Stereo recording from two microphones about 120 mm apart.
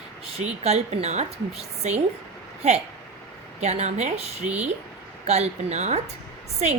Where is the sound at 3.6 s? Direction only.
65° right (ahead or behind).